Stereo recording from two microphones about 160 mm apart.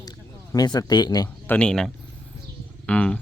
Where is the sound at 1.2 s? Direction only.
10° left (ahead or behind).